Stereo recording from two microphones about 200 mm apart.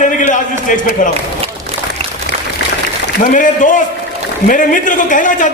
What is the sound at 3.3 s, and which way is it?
A man's voice, 40° left (ahead or behind).